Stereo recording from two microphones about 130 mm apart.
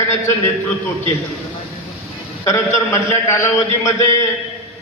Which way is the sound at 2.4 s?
20° left (ahead or behind).